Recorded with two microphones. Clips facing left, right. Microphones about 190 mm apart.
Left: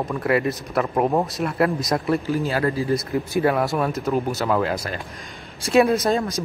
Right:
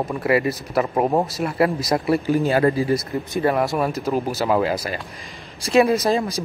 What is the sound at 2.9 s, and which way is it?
Speech, centre (ahead or behind).